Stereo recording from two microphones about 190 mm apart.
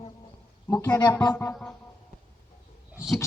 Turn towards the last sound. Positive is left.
turn(degrees=0)  # may be behind; listen again after turning